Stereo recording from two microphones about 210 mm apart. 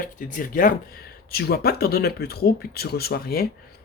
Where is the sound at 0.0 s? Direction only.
40° left (ahead or behind).